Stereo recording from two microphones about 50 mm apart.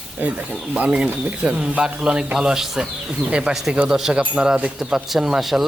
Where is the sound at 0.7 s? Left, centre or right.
Right; by 5.7 s centre.